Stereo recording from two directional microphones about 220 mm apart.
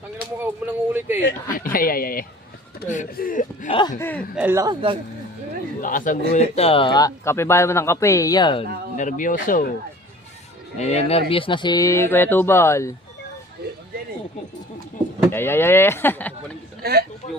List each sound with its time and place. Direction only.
0.4 s speech: 10° right (ahead or behind)
1.2 s speech: 40° left (ahead or behind)
3.7 s speech: 20° left (ahead or behind)
4.4 s speech: 10° right (ahead or behind)
5.8 s speech: 35° left (ahead or behind); by 8.6 s 20° left (ahead or behind)
9.0 s speech: 35° left (ahead or behind)
10.8 s speech: 30° left (ahead or behind); by 12.9 s 10° left (ahead or behind)
15.3 s speech: 10° left (ahead or behind)
16.8 s speech: 45° right (ahead or behind)